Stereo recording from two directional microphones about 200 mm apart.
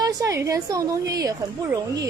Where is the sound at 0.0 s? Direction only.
15° right (ahead or behind).